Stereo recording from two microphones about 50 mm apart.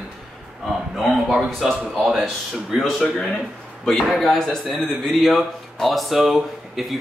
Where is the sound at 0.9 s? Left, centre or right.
Centre.